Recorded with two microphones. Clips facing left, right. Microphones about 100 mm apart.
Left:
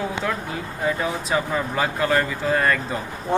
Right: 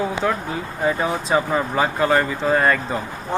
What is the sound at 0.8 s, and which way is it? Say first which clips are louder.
Speech: right 3 dB; 30° right (ahead or behind).